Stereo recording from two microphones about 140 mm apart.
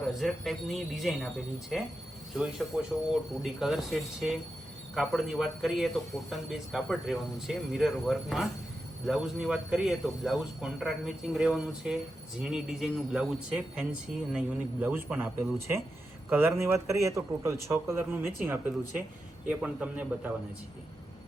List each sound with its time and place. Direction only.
0.2 s a man's voice: centre (ahead or behind)